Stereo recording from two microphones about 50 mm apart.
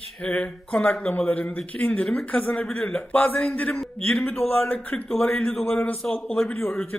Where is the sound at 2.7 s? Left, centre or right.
Left.